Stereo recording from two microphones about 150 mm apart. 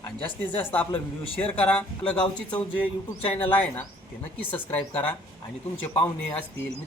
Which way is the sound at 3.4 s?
15° left (ahead or behind).